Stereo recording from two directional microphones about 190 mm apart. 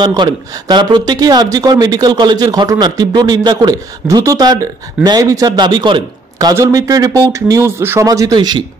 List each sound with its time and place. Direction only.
0.0 s speech: 20° right (ahead or behind)